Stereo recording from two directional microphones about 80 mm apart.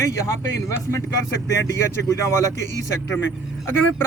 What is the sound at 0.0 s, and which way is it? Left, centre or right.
A man's voice, left.